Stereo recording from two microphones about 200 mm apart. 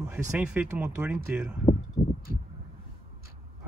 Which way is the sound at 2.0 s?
30° left (ahead or behind).